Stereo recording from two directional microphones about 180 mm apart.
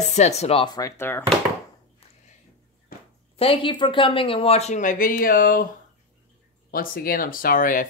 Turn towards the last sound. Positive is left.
turn(degrees=50)  # may be behind; listen again after turning